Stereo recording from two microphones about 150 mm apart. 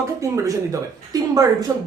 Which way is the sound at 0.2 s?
20° right (ahead or behind).